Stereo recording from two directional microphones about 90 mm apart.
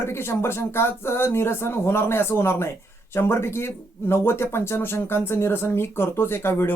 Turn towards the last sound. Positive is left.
turn(degrees=25)  # may be behind; listen again after turning